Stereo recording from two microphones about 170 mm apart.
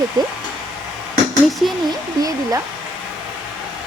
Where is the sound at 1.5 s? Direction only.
Centre (ahead or behind).